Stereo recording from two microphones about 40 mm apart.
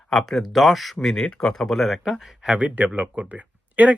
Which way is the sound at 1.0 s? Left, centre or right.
Centre.